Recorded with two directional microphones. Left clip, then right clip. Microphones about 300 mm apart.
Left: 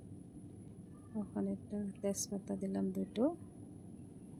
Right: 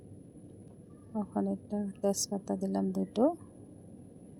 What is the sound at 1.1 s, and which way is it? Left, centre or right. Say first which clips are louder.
A woman's voice: right 7 dB; centre.